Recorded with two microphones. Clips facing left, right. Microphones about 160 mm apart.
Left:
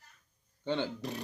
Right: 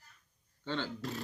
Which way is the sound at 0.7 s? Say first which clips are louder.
Left 4 dB; 15° left (ahead or behind).